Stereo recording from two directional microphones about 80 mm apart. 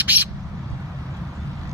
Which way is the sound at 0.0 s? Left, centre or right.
Centre.